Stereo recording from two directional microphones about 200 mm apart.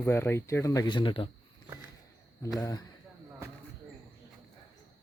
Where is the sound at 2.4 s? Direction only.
20° left (ahead or behind).